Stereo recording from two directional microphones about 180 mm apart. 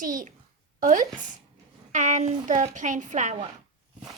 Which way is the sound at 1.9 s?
40° right (ahead or behind).